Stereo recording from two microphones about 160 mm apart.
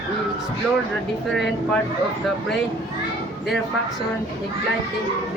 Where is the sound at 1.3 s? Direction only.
Centre (ahead or behind).